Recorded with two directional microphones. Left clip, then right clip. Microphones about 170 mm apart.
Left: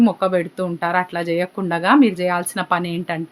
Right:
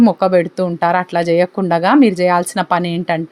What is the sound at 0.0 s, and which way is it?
Speech, 45° right (ahead or behind).